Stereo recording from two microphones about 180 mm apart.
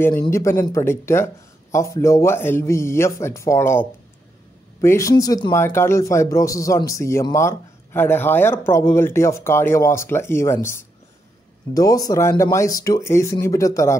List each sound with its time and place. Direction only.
0.2 s speech: 15° left (ahead or behind)
4.8 s speech: 15° left (ahead or behind)